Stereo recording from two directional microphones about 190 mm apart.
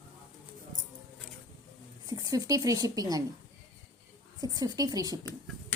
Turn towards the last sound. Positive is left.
turn(degrees=-20)  # may be behind; listen again after turning